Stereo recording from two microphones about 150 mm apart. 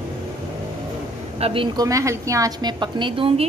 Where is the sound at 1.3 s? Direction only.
40° right (ahead or behind).